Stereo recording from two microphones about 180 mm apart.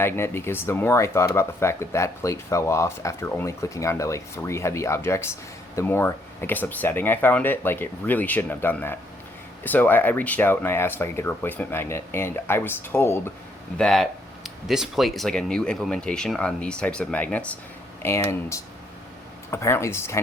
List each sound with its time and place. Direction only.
0.0 s speech: 15° left (ahead or behind)
13.7 s speech: 5° left (ahead or behind)